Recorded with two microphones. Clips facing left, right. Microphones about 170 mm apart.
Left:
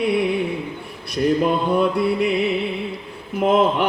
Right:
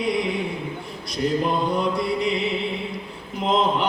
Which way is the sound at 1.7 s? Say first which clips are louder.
Left 5 dB; 60° left (ahead or behind).